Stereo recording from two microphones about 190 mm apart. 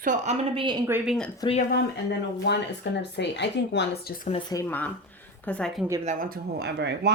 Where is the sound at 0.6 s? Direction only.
20° right (ahead or behind).